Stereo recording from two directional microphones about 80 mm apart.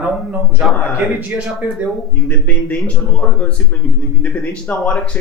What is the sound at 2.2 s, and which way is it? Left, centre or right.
Speech, centre.